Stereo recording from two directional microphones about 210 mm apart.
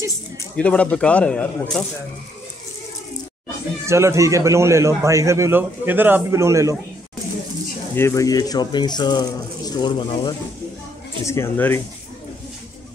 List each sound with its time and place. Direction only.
0.6 s speech: 5° left (ahead or behind)
3.8 s a man's voice: 15° right (ahead or behind)
7.9 s speech: 15° left (ahead or behind)